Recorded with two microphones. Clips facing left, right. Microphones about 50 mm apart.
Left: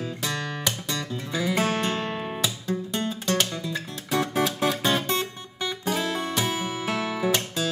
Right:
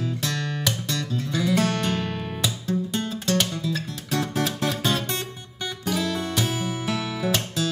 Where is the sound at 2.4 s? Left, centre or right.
Centre.